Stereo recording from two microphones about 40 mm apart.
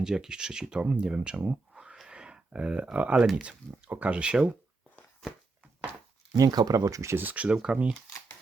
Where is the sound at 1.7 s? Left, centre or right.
Centre.